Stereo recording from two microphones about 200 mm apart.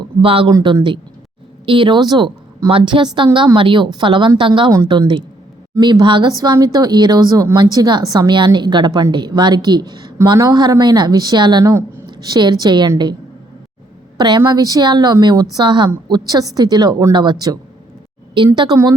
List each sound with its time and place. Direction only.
0.2 s speech: 25° right (ahead or behind)
14.2 s speech: 20° right (ahead or behind)